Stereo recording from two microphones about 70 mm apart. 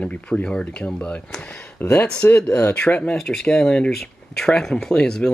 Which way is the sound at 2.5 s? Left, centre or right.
Left.